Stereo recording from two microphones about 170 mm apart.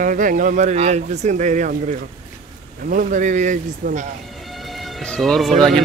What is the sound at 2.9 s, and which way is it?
Speech, 50° right (ahead or behind).